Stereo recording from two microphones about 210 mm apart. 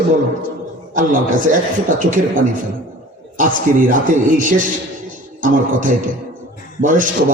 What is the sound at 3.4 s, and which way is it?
A man's voice, 40° right (ahead or behind).